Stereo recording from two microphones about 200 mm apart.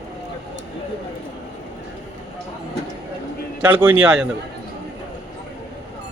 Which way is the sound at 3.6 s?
10° right (ahead or behind).